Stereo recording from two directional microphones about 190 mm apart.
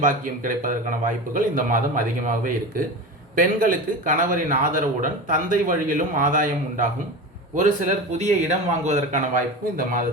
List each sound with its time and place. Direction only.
0.0 s a man's voice: 45° right (ahead or behind)
8.2 s speech: 35° right (ahead or behind)